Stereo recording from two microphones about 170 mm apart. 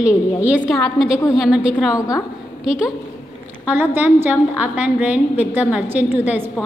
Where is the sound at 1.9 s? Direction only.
20° left (ahead or behind).